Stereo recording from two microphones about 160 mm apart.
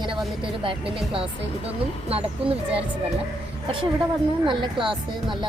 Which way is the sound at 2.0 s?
40° right (ahead or behind).